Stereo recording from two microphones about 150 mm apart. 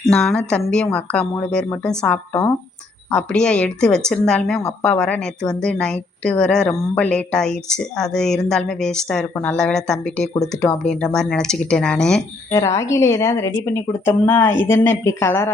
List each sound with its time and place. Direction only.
0.0 s a woman's voice: 5° left (ahead or behind)
12.5 s a woman's voice: 20° left (ahead or behind)